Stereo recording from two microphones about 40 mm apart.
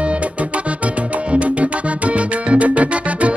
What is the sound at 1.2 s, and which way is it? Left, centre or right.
Music, right.